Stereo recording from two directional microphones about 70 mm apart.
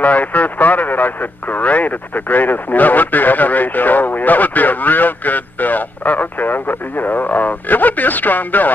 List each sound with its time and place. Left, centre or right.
0.0 s speech: left